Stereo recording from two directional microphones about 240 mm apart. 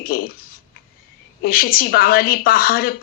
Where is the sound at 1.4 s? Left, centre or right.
Left.